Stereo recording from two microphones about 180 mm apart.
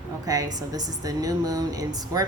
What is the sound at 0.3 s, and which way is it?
Speech, 20° right (ahead or behind).